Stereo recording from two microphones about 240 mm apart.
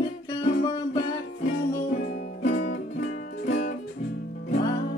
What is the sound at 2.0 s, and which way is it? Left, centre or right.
Music, left.